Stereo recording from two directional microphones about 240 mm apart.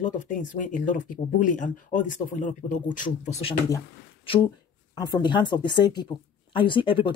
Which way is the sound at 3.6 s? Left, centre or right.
Centre.